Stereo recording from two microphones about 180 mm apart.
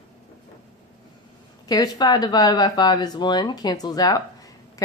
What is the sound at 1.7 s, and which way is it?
A woman's voice, 20° left (ahead or behind).